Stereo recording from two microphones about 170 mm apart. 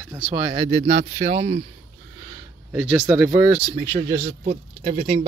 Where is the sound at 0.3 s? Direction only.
25° right (ahead or behind).